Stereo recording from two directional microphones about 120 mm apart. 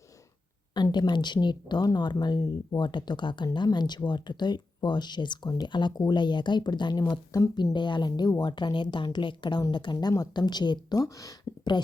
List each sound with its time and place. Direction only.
0.7 s speech: 40° left (ahead or behind)